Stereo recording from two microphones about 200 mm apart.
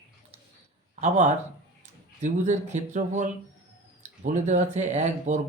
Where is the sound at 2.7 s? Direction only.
35° right (ahead or behind).